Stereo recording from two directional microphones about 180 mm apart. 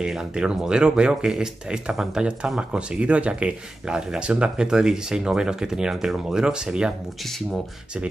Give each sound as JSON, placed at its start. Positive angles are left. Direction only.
{"t": 0.0, "sound": "speech", "side_deg": -5}